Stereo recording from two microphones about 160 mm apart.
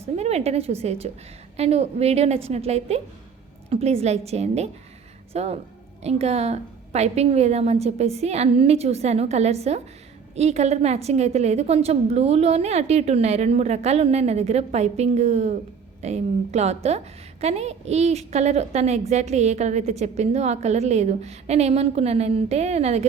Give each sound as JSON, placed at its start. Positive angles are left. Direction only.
{"t": 0.2, "sound": "a woman's voice", "side_deg": -40}